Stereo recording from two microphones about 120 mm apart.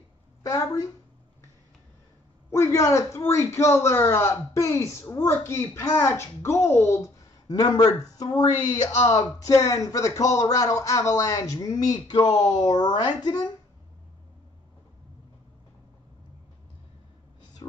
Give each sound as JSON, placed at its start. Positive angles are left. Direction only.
{"t": 0.4, "sound": "a woman's voice", "side_deg": 30}
{"t": 2.5, "sound": "speech", "side_deg": 25}